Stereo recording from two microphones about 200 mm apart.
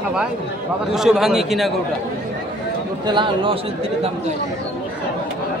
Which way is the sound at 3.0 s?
25° right (ahead or behind).